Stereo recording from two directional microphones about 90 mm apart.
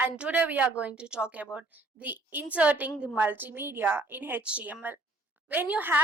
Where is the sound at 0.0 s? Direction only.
15° right (ahead or behind).